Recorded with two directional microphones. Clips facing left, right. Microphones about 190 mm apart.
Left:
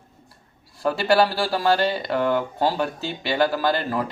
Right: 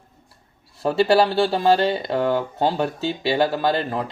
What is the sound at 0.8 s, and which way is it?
Speech, 25° right (ahead or behind).